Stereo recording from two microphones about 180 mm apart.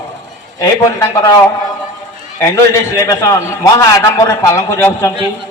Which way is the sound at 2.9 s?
15° left (ahead or behind).